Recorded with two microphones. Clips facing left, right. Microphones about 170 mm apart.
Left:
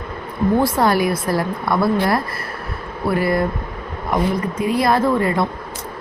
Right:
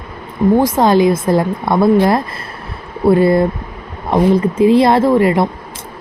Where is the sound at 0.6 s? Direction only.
20° right (ahead or behind).